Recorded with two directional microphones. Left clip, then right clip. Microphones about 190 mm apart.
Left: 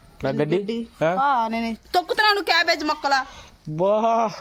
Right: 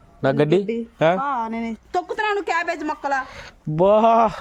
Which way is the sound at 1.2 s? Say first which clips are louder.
Left 4 dB; 5° left (ahead or behind).